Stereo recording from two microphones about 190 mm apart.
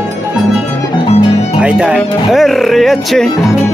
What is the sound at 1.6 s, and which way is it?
Music, 5° right (ahead or behind).